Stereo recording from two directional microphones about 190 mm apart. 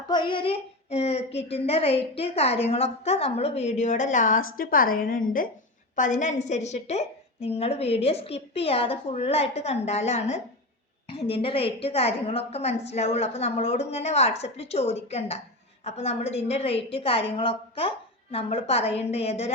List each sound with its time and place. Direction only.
0.1 s a woman's voice: 25° left (ahead or behind)